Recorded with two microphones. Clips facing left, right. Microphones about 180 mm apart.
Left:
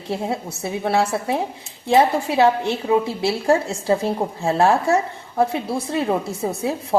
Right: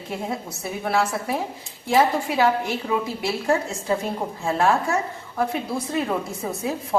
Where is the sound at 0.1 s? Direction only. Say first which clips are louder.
Left 5 dB; 30° left (ahead or behind).